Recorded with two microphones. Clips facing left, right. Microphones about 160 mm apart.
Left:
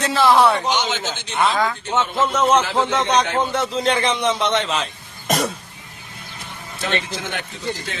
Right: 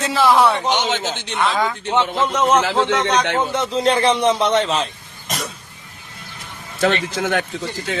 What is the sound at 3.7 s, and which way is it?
A man's voice, 35° right (ahead or behind).